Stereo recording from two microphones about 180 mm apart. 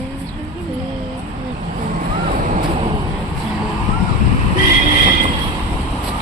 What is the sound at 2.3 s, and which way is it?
Vehicle, 45° right (ahead or behind).